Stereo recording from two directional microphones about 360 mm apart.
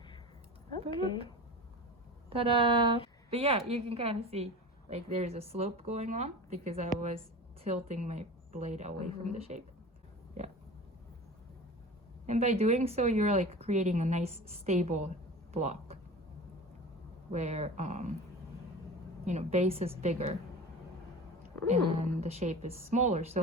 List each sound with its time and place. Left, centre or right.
0.7 s a woman's voice: centre
2.3 s a woman's voice: centre
12.2 s a woman's voice: centre
17.3 s speech: centre
19.2 s a woman's voice: centre
21.7 s a woman's voice: centre